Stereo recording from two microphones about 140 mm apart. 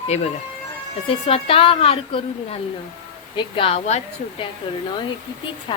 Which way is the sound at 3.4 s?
40° left (ahead or behind).